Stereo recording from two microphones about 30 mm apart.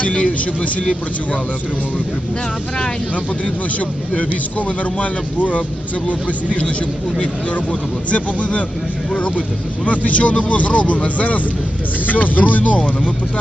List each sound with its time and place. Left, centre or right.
0.0 s speech: left
3.8 s speech: left
7.7 s speech: left
12.0 s speech: left